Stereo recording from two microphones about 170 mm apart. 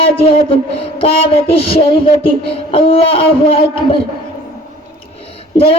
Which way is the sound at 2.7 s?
35° left (ahead or behind).